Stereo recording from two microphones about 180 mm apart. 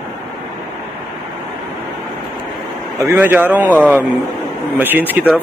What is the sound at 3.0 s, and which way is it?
A man's voice, 10° right (ahead or behind).